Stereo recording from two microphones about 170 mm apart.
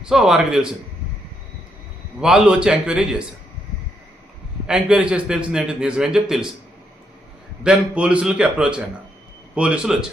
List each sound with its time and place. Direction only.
0.0 s a man's voice: 5° right (ahead or behind)
2.2 s a man's voice: 5° right (ahead or behind)
4.6 s a man's voice: 5° right (ahead or behind)
7.6 s a man's voice: 5° right (ahead or behind)